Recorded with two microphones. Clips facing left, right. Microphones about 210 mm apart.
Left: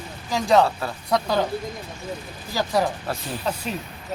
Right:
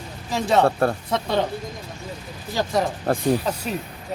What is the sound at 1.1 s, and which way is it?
Speech, 25° right (ahead or behind).